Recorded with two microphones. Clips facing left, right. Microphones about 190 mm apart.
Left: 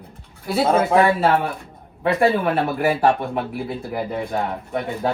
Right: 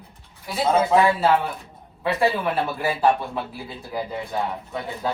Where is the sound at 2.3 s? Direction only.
55° left (ahead or behind).